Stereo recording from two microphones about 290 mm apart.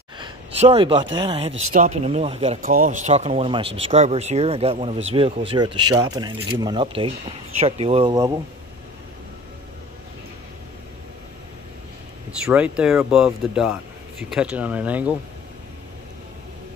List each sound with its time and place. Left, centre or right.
0.2 s a sound: centre
1.1 s speech: centre
12.4 s speech: centre